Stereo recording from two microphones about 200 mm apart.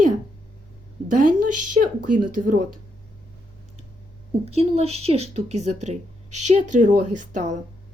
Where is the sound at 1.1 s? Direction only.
40° right (ahead or behind).